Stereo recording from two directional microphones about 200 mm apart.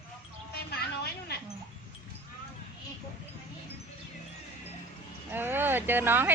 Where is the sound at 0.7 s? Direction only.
50° left (ahead or behind).